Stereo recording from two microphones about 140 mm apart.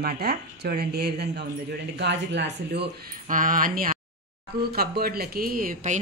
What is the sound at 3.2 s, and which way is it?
Speech, 75° right (ahead or behind).